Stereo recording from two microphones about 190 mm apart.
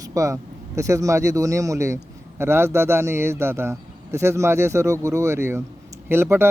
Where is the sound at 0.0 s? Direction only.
15° right (ahead or behind).